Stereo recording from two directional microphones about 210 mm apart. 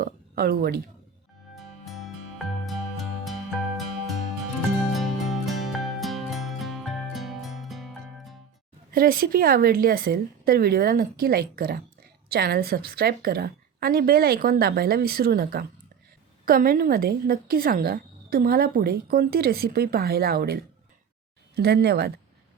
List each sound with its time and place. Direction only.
0.0 s a sound: 45° right (ahead or behind)
1.5 s music: centre (ahead or behind)
8.9 s a woman's voice: 45° right (ahead or behind)